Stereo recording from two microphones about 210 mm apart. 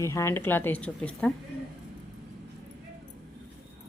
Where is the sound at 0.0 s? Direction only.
15° left (ahead or behind).